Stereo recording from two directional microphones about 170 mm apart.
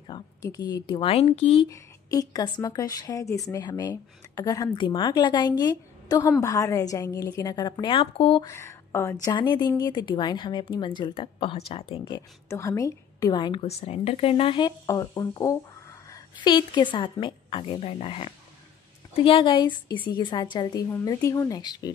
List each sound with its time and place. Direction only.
0.0 s speech: 25° left (ahead or behind)
1.1 s a woman's voice: 40° left (ahead or behind)
1.7 s a woman's voice: 20° left (ahead or behind)
8.5 s a woman's voice: 15° left (ahead or behind); by 12.2 s 35° left (ahead or behind)
12.4 s a woman's voice: 15° left (ahead or behind)